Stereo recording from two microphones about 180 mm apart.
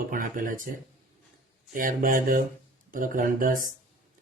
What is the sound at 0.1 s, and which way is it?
Speech, 50° right (ahead or behind).